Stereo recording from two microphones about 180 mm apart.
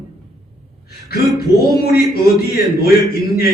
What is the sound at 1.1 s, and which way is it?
A man's voice, 60° left (ahead or behind).